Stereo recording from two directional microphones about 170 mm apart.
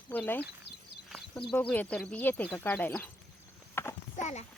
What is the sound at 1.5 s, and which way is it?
Speech, 5° left (ahead or behind).